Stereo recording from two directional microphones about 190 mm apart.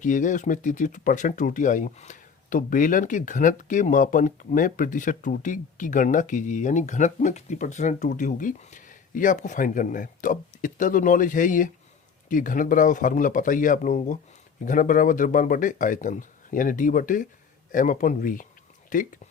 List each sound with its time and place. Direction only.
0.0 s speech: 40° left (ahead or behind)